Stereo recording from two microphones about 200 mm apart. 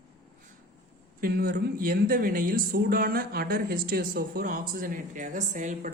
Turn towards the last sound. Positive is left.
turn(degrees=-40)  # may be behind; listen again after turning